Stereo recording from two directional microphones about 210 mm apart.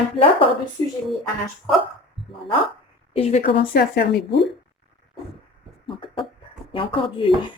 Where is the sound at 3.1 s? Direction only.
30° left (ahead or behind).